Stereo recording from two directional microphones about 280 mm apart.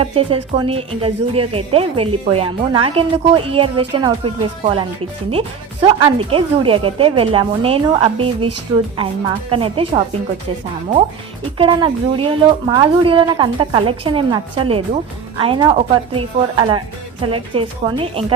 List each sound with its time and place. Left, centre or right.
0.0 s a woman's voice: centre
9.5 s a woman's voice: centre
11.5 s a woman's voice: centre